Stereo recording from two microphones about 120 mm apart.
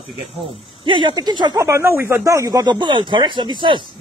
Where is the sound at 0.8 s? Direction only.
40° right (ahead or behind).